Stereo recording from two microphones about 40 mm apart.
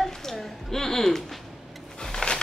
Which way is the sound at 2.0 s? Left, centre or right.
Centre.